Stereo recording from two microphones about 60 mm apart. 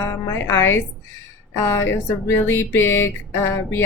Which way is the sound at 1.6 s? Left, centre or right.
Left.